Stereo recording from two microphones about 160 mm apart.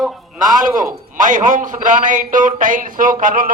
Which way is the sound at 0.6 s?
55° right (ahead or behind).